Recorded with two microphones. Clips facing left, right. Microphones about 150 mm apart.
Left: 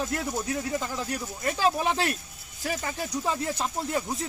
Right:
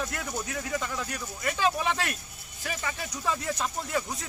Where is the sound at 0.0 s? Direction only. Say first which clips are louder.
Left 4 dB; 25° left (ahead or behind).